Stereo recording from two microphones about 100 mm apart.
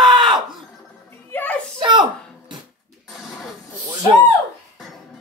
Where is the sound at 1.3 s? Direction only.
20° left (ahead or behind).